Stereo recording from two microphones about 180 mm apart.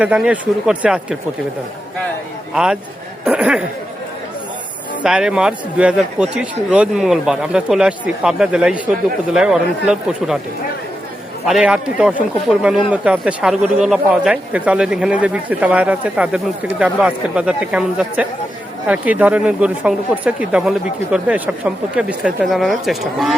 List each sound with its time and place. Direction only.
0.0 s speech: 5° right (ahead or behind)
3.2 s speech: 5° right (ahead or behind)
5.0 s a man's voice: 5° right (ahead or behind)
11.4 s a man's voice: 5° right (ahead or behind)